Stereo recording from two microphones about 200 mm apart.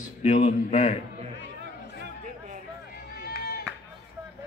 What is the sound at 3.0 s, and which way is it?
Run, 50° left (ahead or behind).